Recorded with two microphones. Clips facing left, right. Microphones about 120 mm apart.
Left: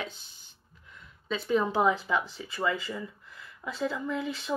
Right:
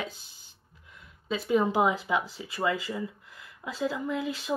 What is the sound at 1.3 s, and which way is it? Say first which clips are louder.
Speech: right 2 dB; 15° right (ahead or behind).